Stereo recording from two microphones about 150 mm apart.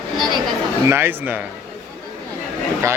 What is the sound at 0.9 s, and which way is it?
Speech, 15° right (ahead or behind).